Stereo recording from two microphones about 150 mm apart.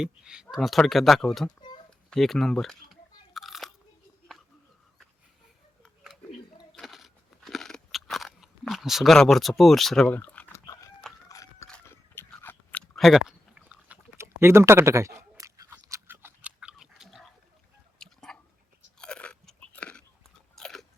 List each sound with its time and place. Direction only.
0.0 s speech: 5° right (ahead or behind)
2.0 s crunch: centre (ahead or behind)
5.8 s a sound: centre (ahead or behind)
6.7 s crunch: centre (ahead or behind)
11.3 s biting: 20° left (ahead or behind)
13.0 s chewing: centre (ahead or behind)
16.6 s chewing: 5° right (ahead or behind)
18.0 s a sound: 5° left (ahead or behind)
18.9 s crunch: 5° left (ahead or behind)
20.6 s biting: 5° left (ahead or behind)